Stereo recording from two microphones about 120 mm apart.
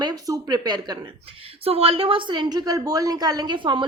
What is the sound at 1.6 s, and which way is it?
A woman's voice, 55° right (ahead or behind).